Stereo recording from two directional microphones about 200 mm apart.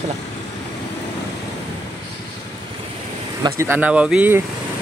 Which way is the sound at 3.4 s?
15° right (ahead or behind).